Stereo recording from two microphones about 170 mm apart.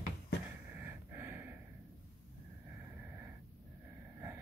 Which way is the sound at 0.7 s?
15° right (ahead or behind).